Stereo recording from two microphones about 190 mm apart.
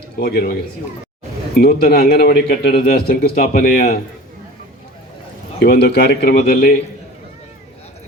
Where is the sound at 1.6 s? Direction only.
55° left (ahead or behind).